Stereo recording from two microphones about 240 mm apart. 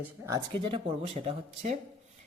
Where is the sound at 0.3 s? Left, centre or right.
Centre.